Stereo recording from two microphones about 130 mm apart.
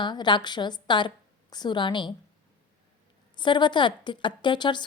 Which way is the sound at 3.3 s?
35° left (ahead or behind).